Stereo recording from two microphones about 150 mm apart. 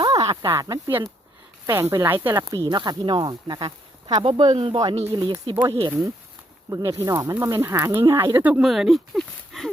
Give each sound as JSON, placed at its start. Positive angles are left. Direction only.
{"t": 0.0, "sound": "snake", "side_deg": -25}
{"t": 0.4, "sound": "speech", "side_deg": -20}
{"t": 2.6, "sound": "speech", "side_deg": -30}